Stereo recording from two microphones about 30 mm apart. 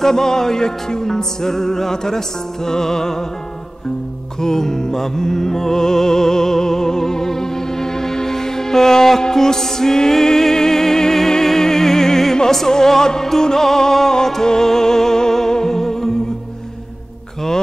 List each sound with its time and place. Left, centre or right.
0.0 s music: centre
4.4 s music: centre